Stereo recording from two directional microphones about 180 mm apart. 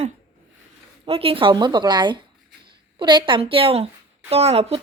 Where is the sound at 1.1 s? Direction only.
30° right (ahead or behind).